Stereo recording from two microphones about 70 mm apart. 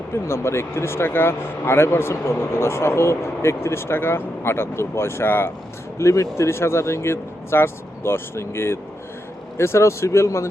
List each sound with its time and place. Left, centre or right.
0.1 s speech: left
6.0 s speech: left